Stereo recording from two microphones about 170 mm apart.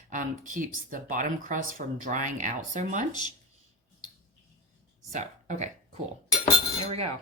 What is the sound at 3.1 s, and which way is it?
Speech, 25° left (ahead or behind).